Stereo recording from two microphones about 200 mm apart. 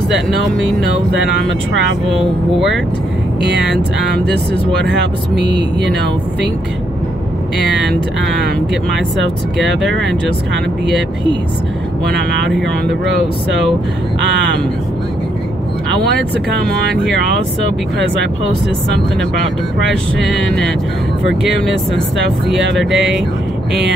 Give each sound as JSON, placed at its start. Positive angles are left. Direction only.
{"t": 4.8, "sound": "speech", "side_deg": -60}
{"t": 9.8, "sound": "speech", "side_deg": 0}
{"t": 22.8, "sound": "speech", "side_deg": 0}